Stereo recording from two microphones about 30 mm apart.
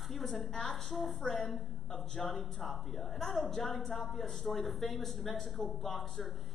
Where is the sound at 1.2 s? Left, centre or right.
Centre.